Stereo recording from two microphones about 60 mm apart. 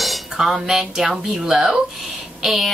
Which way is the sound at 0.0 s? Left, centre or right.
Centre.